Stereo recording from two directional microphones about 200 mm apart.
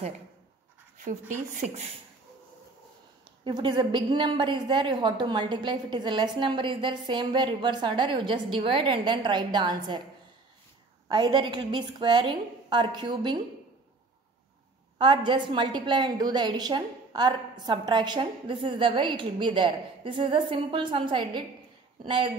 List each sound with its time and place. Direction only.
0.9 s speech: 40° right (ahead or behind)
3.4 s a woman's voice: 25° right (ahead or behind)
11.1 s a woman's voice: 20° right (ahead or behind)
15.0 s a woman's voice: 25° right (ahead or behind)